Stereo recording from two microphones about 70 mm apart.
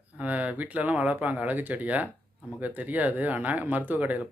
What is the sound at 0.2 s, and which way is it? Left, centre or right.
Speech, right.